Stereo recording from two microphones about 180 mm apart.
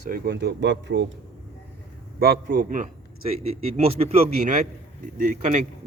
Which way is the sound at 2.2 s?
55° right (ahead or behind).